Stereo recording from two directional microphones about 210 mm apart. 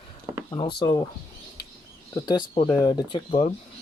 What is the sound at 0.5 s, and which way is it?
Speech, 20° left (ahead or behind).